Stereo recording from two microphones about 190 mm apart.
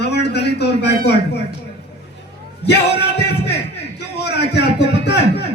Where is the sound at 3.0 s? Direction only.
60° left (ahead or behind).